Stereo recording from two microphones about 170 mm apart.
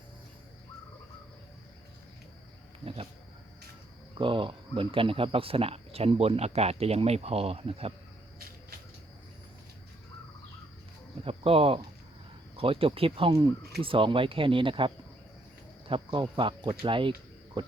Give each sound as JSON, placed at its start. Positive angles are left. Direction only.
{"t": 2.8, "sound": "speech", "side_deg": -35}
{"t": 4.2, "sound": "speech", "side_deg": -30}
{"t": 11.3, "sound": "speech", "side_deg": -35}
{"t": 17.6, "sound": "frog", "side_deg": -30}